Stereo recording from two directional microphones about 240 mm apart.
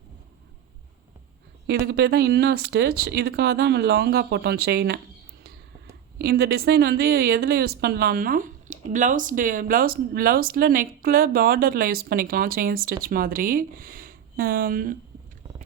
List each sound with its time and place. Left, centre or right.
1.8 s a woman's voice: right
6.1 s a woman's voice: right